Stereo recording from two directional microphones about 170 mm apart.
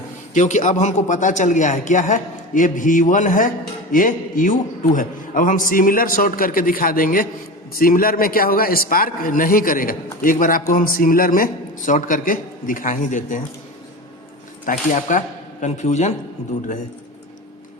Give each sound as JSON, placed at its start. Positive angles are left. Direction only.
{"t": 0.3, "sound": "a man's voice", "side_deg": 45}
{"t": 14.6, "sound": "a man's voice", "side_deg": 50}